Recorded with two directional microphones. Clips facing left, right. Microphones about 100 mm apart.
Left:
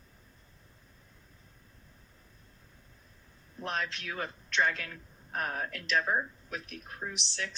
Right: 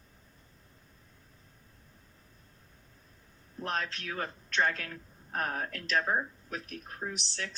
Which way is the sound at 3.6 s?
40° right (ahead or behind).